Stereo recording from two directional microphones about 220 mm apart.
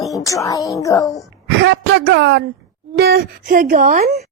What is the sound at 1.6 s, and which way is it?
A woman's voice, 55° right (ahead or behind).